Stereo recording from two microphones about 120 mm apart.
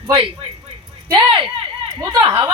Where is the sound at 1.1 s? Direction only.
45° right (ahead or behind).